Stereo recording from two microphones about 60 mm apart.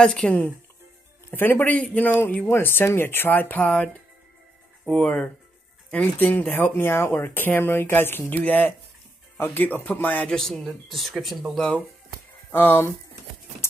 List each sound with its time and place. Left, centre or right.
0.0 s speech: centre
1.3 s speech: left
1.6 s a man's voice: left
2.4 s speech: left
4.9 s a man's voice: left
6.1 s a man's voice: left
10.3 s speech: centre
11.5 s speech: centre
12.4 s speech: left